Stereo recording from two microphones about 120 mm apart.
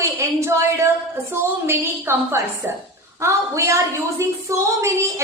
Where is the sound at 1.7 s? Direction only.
20° right (ahead or behind).